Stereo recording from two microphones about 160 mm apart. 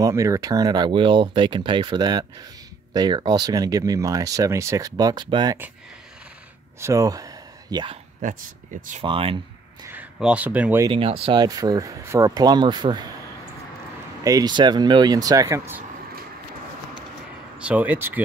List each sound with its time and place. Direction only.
0.0 s speech: 20° right (ahead or behind)
6.8 s speech: 20° right (ahead or behind)
9.0 s speech: 35° right (ahead or behind)
10.1 s speech: 5° right (ahead or behind)
10.9 s speech: 35° right (ahead or behind)
11.4 s speech: 25° right (ahead or behind)
14.2 s speech: 25° right (ahead or behind)
17.6 s speech: 10° right (ahead or behind)